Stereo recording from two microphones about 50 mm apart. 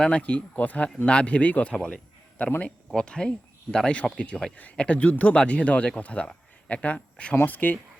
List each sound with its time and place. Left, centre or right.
0.0 s speech: left
2.9 s speech: centre
7.3 s speech: left